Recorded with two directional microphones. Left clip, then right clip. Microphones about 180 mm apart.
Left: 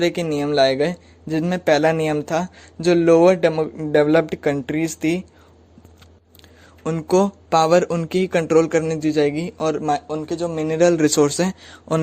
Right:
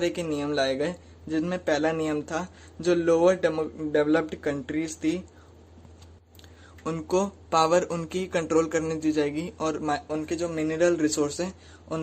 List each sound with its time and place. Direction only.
0.0 s speech: 40° left (ahead or behind)
6.8 s speech: 35° left (ahead or behind)
10.8 s a man's voice: 40° left (ahead or behind)